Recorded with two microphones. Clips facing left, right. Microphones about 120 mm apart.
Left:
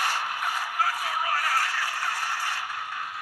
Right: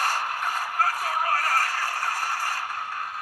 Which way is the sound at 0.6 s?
45° right (ahead or behind).